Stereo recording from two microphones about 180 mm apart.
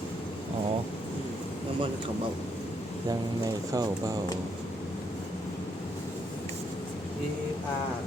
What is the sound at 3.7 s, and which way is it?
Speech, 20° right (ahead or behind).